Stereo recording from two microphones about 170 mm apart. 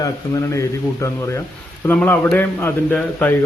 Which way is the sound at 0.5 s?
20° left (ahead or behind).